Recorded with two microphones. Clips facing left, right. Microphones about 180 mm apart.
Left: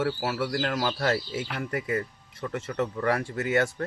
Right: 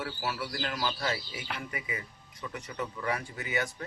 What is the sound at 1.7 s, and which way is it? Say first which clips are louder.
Speech: left 10 dB; 70° left (ahead or behind).